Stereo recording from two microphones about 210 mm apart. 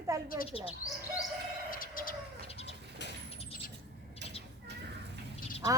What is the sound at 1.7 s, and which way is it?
Bird, 40° left (ahead or behind).